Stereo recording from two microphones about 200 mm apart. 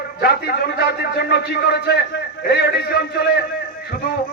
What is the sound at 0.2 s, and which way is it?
A man's voice, 50° left (ahead or behind).